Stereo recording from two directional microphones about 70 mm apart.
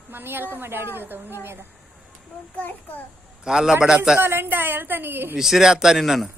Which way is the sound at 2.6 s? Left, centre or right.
Left.